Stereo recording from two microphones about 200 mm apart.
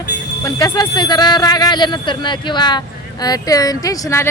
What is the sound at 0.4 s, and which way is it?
A man's voice, 20° left (ahead or behind).